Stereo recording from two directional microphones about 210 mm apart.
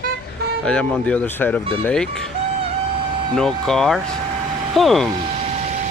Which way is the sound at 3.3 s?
5° left (ahead or behind).